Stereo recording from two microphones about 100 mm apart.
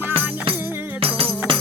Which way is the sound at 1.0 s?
70° right (ahead or behind).